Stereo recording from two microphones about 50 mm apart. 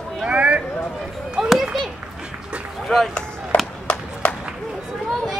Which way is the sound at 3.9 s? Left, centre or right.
Left.